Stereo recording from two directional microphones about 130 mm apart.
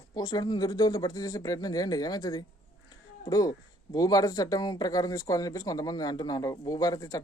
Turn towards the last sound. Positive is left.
turn(degrees=30)  # may be behind; listen again after turning